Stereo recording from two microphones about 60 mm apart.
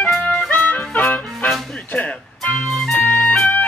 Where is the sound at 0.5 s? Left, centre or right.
Left.